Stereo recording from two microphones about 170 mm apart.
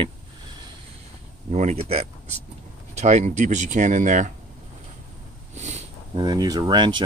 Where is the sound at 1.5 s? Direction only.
40° right (ahead or behind).